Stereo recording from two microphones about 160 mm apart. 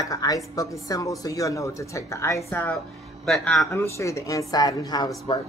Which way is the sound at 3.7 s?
15° left (ahead or behind).